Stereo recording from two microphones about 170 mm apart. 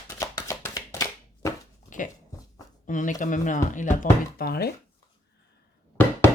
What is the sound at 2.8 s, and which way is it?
Speech, 50° left (ahead or behind).